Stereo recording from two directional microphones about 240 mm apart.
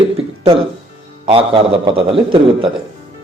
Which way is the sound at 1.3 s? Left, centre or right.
Right.